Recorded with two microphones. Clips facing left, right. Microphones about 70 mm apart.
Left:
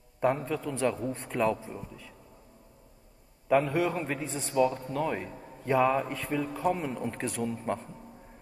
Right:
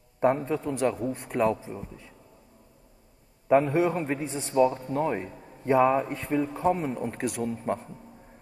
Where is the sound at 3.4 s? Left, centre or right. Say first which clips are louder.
Right 4 dB; right.